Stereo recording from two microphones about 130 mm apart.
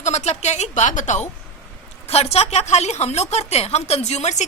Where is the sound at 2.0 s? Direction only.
50° left (ahead or behind).